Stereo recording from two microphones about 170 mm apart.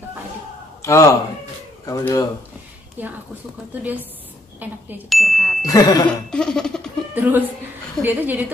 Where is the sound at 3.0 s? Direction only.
10° right (ahead or behind).